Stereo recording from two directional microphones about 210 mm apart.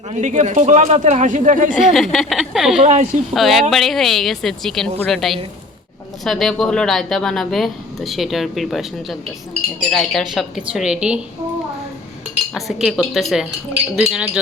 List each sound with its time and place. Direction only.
0.1 s speech: 35° right (ahead or behind)
1.7 s speech: centre (ahead or behind)
2.8 s speech: 35° right (ahead or behind)
3.3 s speech: centre (ahead or behind)
12.5 s speech: centre (ahead or behind)